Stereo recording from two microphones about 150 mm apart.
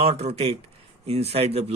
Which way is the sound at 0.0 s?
45° right (ahead or behind).